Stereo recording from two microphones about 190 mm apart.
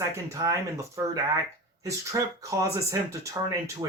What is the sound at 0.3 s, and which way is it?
Speech, 15° right (ahead or behind).